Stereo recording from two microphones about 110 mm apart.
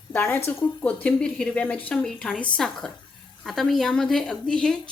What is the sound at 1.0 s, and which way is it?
A woman's voice, 10° left (ahead or behind).